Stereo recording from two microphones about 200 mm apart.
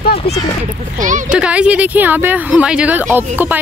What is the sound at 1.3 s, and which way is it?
Speech, 5° right (ahead or behind).